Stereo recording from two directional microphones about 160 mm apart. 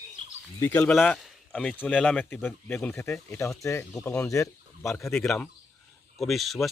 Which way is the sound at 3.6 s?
20° left (ahead or behind).